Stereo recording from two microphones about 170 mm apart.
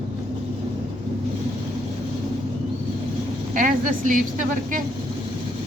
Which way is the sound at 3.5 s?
50° right (ahead or behind).